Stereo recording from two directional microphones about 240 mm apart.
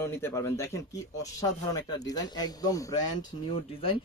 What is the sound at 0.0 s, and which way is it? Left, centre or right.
Speech, centre.